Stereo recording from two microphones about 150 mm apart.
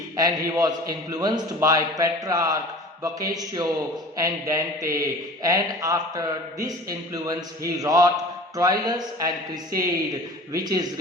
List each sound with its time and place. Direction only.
0.2 s speech: 25° right (ahead or behind)
10.5 s speech: 25° right (ahead or behind)